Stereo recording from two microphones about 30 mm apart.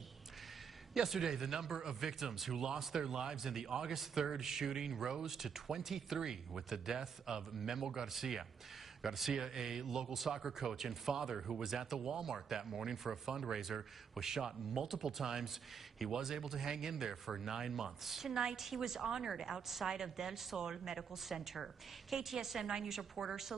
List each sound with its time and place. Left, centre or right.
0.9 s speech: centre
3.0 s speech: centre
9.3 s speech: centre